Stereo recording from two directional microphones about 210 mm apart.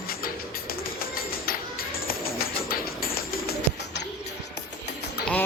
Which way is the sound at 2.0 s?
45° left (ahead or behind).